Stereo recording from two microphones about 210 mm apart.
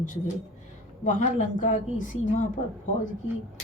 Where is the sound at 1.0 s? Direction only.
35° left (ahead or behind).